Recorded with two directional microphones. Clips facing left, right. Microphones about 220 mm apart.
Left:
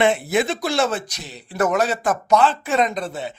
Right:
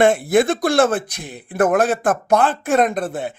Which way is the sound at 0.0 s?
50° right (ahead or behind).